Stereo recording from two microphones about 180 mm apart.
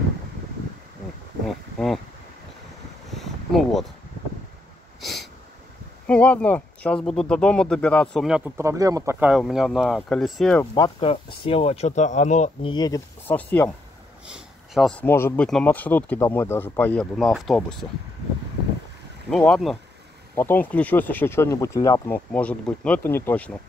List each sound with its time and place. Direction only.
3.1 s a sound: centre (ahead or behind)
6.0 s speech: 5° left (ahead or behind)
8.5 s speech: 15° right (ahead or behind); by 10.6 s centre (ahead or behind)
10.6 s speech: 20° left (ahead or behind); by 12.4 s 40° left (ahead or behind)
12.6 s speech: 20° left (ahead or behind)
13.3 s speech: 10° left (ahead or behind)
14.2 s speech: 5° right (ahead or behind)
19.3 s speech: centre (ahead or behind)